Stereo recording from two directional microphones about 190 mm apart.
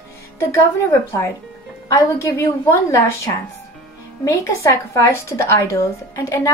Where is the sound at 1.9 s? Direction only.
15° left (ahead or behind).